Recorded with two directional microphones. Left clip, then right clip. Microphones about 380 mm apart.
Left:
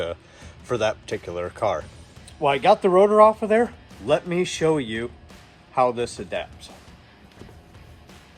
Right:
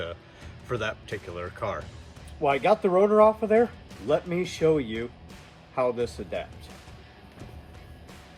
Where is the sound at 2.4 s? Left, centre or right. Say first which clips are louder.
Left 4 dB; left.